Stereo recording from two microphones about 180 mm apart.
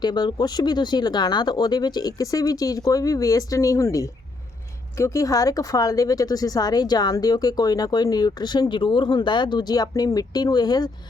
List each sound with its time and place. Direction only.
0.0 s speech: 25° left (ahead or behind)